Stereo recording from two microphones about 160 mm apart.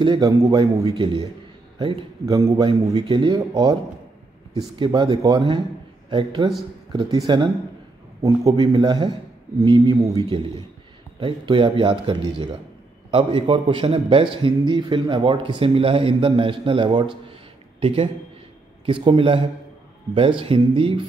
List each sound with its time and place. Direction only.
0.0 s a man's voice: 25° right (ahead or behind)
17.3 s a sound: 35° right (ahead or behind)
18.9 s speech: 30° right (ahead or behind)